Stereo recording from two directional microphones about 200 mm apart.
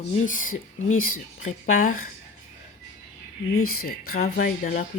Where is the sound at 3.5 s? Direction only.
90° left.